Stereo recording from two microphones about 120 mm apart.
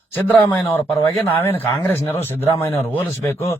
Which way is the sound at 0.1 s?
15° left (ahead or behind).